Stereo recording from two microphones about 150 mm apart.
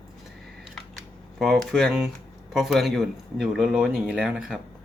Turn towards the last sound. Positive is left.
turn(degrees=-5)  # may be behind; listen again after turning